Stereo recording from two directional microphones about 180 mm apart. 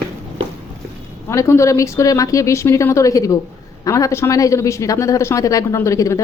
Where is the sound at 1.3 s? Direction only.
15° left (ahead or behind).